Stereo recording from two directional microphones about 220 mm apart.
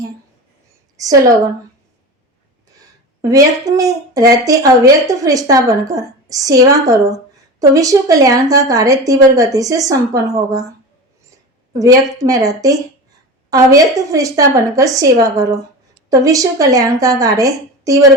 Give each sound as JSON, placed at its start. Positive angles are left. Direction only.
{"t": 0.9, "sound": "a woman's voice", "side_deg": -15}
{"t": 2.7, "sound": "speech", "side_deg": -15}
{"t": 12.1, "sound": "speech", "side_deg": -15}